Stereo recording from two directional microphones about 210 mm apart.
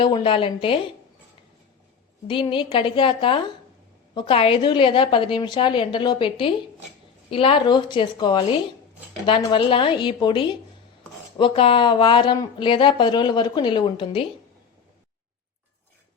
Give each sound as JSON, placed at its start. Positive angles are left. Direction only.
{"t": 0.0, "sound": "speech", "side_deg": 25}
{"t": 2.2, "sound": "speech", "side_deg": 25}